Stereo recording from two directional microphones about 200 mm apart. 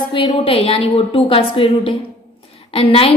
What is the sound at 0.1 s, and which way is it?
A woman's voice, 25° left (ahead or behind).